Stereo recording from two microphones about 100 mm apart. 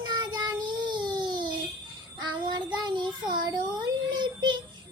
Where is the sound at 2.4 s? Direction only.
50° right (ahead or behind).